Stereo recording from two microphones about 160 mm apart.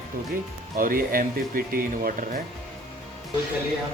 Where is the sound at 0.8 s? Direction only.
60° right (ahead or behind).